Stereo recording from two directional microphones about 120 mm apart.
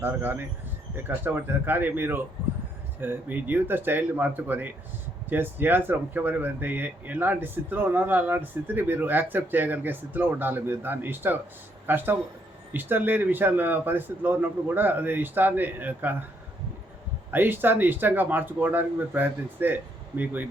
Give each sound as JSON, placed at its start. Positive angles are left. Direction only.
{"t": 0.0, "sound": "speech", "side_deg": -15}
{"t": 17.3, "sound": "speech", "side_deg": -15}